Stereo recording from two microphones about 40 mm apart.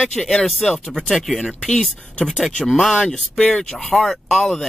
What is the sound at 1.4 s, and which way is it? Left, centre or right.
Speech, centre.